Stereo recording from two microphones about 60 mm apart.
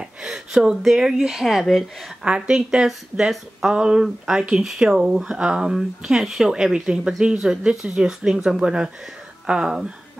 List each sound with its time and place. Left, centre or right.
0.0 s speech: centre
2.2 s speech: centre